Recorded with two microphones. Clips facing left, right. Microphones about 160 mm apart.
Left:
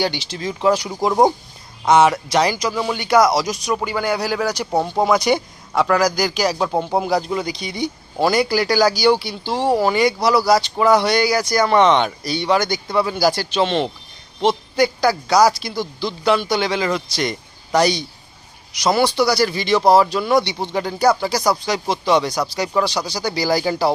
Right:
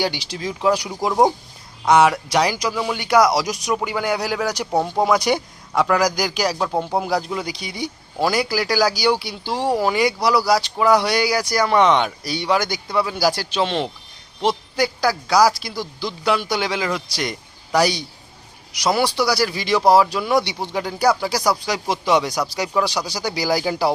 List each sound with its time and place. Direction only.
0.0 s speech: 5° right (ahead or behind)
4.6 s speech: 5° left (ahead or behind)
5.3 s speech: 5° right (ahead or behind)
6.1 s speech: 15° right (ahead or behind)
6.4 s speech: 5° left (ahead or behind)